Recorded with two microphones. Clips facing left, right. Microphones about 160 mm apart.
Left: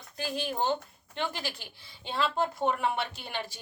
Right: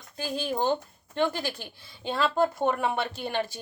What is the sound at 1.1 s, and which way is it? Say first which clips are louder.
A woman's voice: right 7 dB; 45° right (ahead or behind).